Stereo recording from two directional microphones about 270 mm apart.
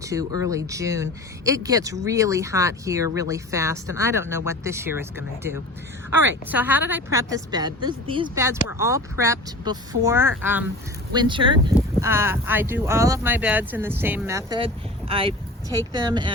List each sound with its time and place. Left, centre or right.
0.0 s speech: centre